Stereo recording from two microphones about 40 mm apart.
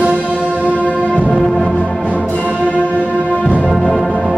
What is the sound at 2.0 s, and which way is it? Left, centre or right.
Music, left.